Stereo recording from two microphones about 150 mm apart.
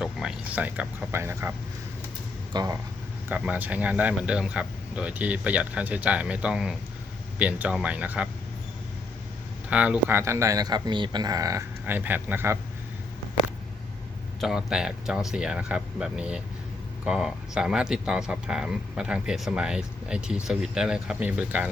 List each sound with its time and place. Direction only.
0.0 s speech: 5° right (ahead or behind)
2.5 s speech: 25° right (ahead or behind)
3.2 s speech: 10° right (ahead or behind)
9.6 s speech: 10° right (ahead or behind)
14.4 s speech: 5° right (ahead or behind)